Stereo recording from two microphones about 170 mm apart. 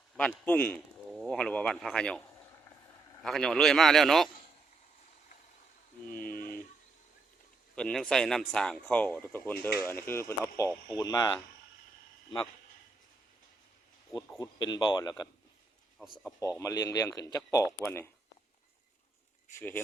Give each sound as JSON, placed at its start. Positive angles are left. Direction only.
{"t": 0.2, "sound": "speech", "side_deg": 10}
{"t": 3.2, "sound": "speech", "side_deg": 5}
{"t": 7.8, "sound": "speech", "side_deg": 5}
{"t": 14.3, "sound": "speech", "side_deg": 25}
{"t": 16.4, "sound": "speech", "side_deg": 20}
{"t": 19.5, "sound": "speech", "side_deg": 10}